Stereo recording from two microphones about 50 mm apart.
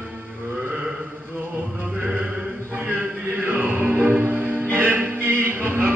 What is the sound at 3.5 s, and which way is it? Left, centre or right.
Music, right.